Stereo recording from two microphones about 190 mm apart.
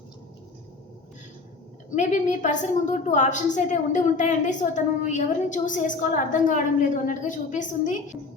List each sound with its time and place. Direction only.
2.0 s a woman's voice: 40° left (ahead or behind)